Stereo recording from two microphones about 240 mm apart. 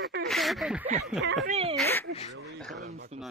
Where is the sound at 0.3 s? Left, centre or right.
Centre.